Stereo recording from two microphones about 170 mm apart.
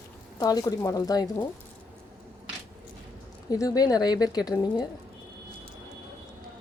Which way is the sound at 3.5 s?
20° left (ahead or behind).